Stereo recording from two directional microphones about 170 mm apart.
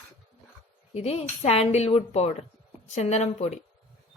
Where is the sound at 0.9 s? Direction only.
40° left (ahead or behind).